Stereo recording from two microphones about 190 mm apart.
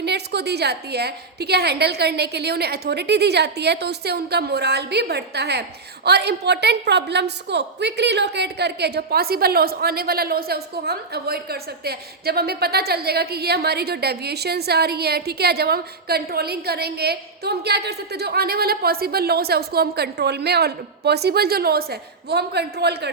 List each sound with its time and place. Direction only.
0.0 s a woman's voice: 60° right (ahead or behind)